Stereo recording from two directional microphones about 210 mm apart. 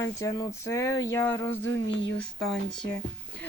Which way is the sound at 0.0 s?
15° left (ahead or behind).